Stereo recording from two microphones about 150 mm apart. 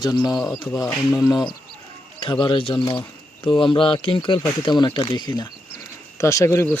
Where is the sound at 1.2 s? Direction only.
30° left (ahead or behind).